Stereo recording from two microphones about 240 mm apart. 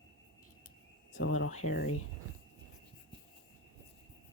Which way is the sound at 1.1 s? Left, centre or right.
Left.